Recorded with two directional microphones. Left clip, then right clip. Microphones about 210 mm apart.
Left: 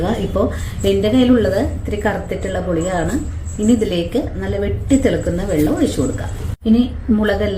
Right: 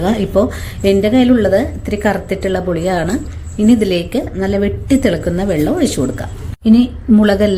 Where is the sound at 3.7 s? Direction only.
45° right (ahead or behind).